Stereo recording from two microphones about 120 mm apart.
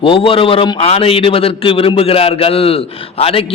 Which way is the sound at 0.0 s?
50° left (ahead or behind).